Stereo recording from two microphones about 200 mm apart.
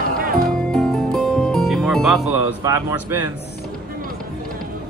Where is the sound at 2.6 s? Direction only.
10° right (ahead or behind).